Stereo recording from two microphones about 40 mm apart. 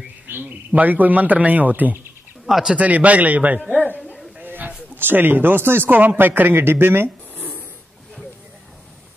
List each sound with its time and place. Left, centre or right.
0.3 s speech: right
0.7 s speech: right
2.4 s speech: centre
2.8 s a man's voice: right
4.4 s a sound: right
4.9 s speech: right
5.9 s speech: right
6.6 s speech: right